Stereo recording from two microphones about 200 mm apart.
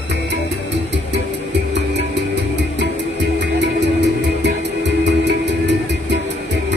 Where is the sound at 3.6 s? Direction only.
60° right (ahead or behind).